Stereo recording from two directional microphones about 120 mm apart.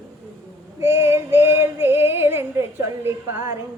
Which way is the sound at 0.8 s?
20° right (ahead or behind).